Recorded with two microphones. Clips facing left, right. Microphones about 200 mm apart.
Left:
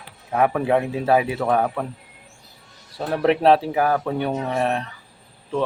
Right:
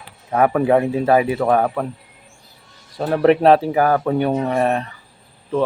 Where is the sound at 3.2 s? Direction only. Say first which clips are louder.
Right 4 dB; centre (ahead or behind).